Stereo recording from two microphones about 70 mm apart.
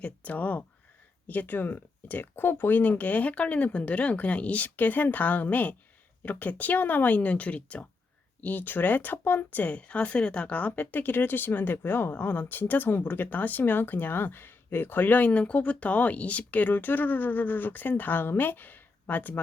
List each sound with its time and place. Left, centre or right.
0.0 s speech: left